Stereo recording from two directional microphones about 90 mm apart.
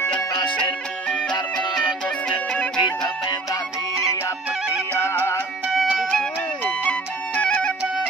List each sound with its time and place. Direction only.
0.3 s music: 60° left (ahead or behind)
4.9 s music: 25° left (ahead or behind)
6.6 s music: 20° left (ahead or behind)